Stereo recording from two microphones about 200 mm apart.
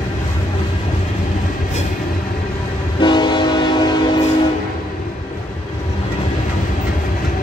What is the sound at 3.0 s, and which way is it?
Train horn, 20° left (ahead or behind).